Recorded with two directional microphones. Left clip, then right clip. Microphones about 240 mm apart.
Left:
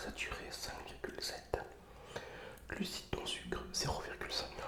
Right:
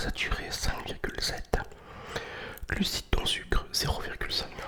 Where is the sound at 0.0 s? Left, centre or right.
Right.